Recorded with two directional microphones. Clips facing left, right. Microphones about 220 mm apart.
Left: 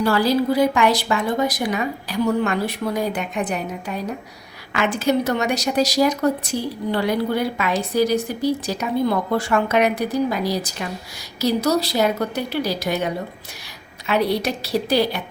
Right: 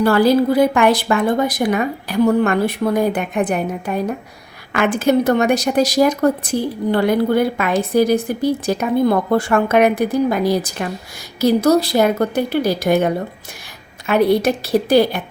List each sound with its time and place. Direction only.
0.0 s a woman's voice: 55° right (ahead or behind)